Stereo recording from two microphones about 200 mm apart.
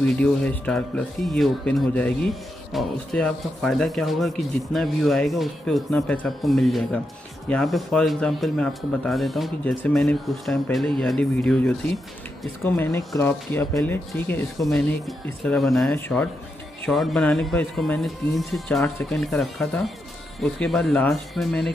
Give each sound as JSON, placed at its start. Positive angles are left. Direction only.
{"t": 0.0, "sound": "speech", "side_deg": 5}